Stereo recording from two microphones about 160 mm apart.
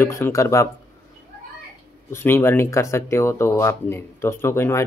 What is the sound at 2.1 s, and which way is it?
A man's voice, 15° left (ahead or behind).